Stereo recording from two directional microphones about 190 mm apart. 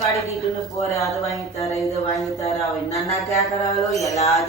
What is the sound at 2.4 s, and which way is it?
Speech, 35° left (ahead or behind).